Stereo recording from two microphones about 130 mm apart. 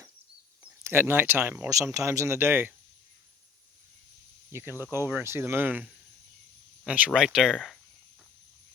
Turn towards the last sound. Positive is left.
turn(degrees=0)  # may be behind; listen again after turning